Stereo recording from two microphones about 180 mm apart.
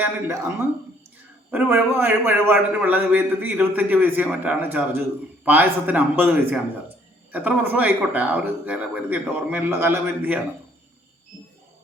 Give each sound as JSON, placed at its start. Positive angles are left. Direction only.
{"t": 1.5, "sound": "a man's voice", "side_deg": -10}